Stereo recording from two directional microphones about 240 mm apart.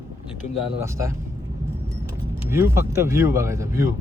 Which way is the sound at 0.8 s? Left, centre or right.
Centre.